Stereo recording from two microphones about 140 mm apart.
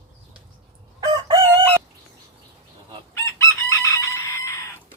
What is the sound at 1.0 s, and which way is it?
Chicken, 30° right (ahead or behind).